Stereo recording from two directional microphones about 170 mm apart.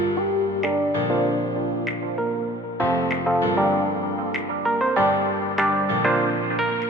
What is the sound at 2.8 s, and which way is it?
Music, 10° left (ahead or behind).